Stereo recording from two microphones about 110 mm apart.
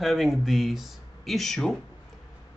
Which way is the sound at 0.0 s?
Centre (ahead or behind).